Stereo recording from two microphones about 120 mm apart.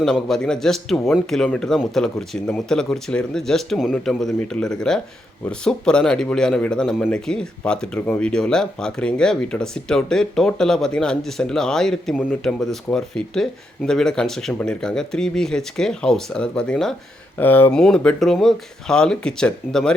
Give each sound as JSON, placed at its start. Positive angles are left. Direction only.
{"t": 0.0, "sound": "a man's voice", "side_deg": 5}
{"t": 17.3, "sound": "speech", "side_deg": 15}